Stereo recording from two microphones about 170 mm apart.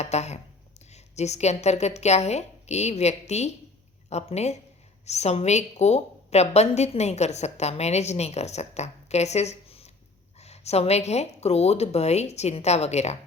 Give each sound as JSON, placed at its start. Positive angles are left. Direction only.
{"t": 0.0, "sound": "a woman's voice", "side_deg": 40}